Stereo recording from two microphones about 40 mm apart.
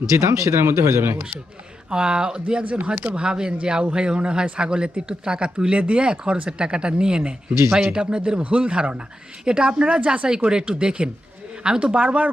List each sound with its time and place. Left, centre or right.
0.5 s a man's voice: right
1.9 s speech: right
2.8 s speech: right
3.2 s speech: right
7.7 s speech: centre
7.9 s speech: right